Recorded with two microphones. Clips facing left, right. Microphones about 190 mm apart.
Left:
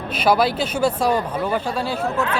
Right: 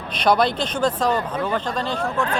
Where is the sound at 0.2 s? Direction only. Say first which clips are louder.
Left 1 dB; 5° left (ahead or behind).